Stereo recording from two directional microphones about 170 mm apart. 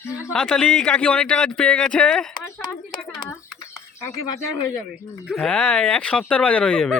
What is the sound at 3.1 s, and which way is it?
Speech, 15° left (ahead or behind).